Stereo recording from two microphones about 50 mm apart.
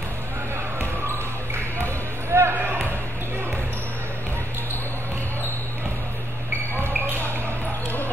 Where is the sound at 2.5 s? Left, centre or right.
Right.